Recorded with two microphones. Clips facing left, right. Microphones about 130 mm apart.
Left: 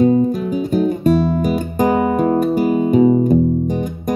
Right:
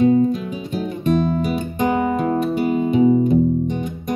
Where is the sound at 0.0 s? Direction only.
35° left (ahead or behind).